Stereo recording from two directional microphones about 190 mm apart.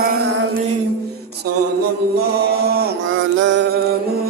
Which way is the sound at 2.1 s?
55° right (ahead or behind).